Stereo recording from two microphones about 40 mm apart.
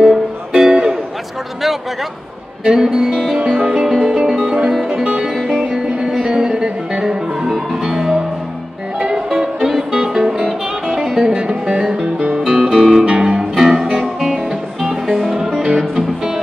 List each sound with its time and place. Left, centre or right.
0.0 s music: centre
2.6 s speech: centre
3.3 s music: right
5.2 s speech: centre
6.2 s music: right
7.4 s music: centre
7.8 s music: centre
12.2 s music: right
12.4 s music: centre
15.0 s music: centre
15.5 s music: right